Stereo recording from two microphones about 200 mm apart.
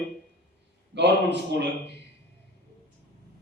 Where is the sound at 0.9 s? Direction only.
60° right (ahead or behind).